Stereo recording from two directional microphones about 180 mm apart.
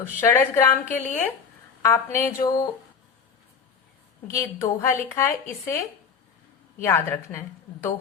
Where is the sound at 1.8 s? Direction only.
15° left (ahead or behind).